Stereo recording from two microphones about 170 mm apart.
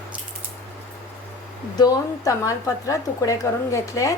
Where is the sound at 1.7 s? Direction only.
20° left (ahead or behind).